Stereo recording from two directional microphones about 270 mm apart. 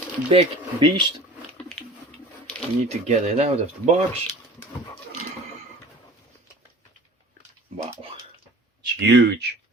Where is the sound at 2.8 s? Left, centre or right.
Right.